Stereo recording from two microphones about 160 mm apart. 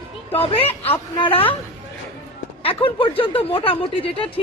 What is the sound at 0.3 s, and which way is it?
Speech, 35° left (ahead or behind).